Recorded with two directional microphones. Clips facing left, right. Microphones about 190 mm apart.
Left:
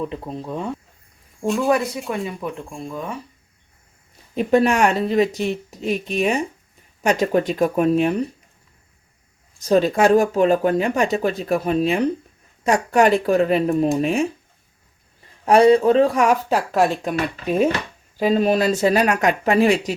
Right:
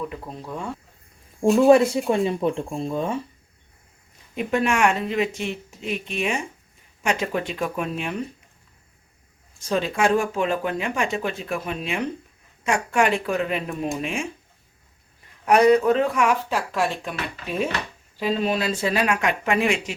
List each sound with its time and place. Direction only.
0.0 s speech: 25° left (ahead or behind)
1.5 s speech: 25° right (ahead or behind)
4.4 s speech: 35° left (ahead or behind)
9.6 s speech: 40° left (ahead or behind)
15.4 s speech: 30° left (ahead or behind)